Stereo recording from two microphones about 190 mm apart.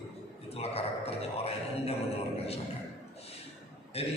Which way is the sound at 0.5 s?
30° left (ahead or behind).